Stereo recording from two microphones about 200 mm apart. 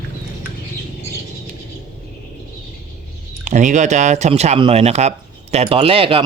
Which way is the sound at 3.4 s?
35° right (ahead or behind).